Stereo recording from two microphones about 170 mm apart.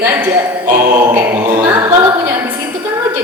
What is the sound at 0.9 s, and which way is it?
A capella, 10° right (ahead or behind).